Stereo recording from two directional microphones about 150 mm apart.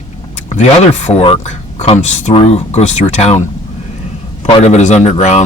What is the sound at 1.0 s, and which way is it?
Speech, 40° left (ahead or behind).